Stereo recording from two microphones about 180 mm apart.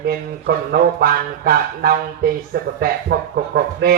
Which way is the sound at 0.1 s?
55° right (ahead or behind).